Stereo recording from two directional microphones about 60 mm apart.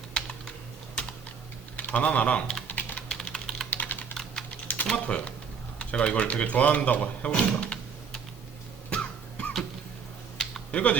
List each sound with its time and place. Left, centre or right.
0.1 s typing: centre
1.7 s speech: left
2.6 s typing: left
3.1 s typing: centre
3.7 s typing: left
4.1 s typing: centre
4.9 s speech: left
8.9 s cough: centre
10.7 s speech: left